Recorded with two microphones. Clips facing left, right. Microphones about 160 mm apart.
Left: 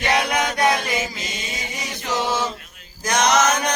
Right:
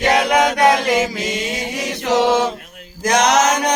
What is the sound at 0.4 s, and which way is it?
Chant, 75° right (ahead or behind).